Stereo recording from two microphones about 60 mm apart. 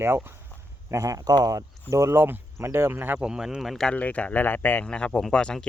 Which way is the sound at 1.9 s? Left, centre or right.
Right.